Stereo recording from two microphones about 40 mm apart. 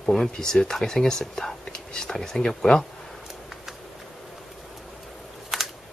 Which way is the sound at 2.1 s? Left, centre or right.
Centre.